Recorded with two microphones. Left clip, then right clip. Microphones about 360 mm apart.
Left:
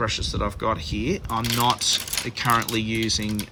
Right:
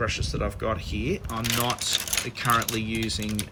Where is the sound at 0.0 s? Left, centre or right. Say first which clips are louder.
Left 3 dB; centre.